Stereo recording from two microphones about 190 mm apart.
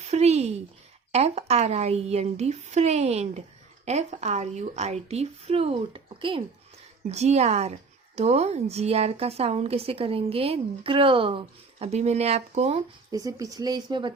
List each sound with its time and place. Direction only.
0.1 s speech: 35° right (ahead or behind)
13.1 s speech: 20° right (ahead or behind)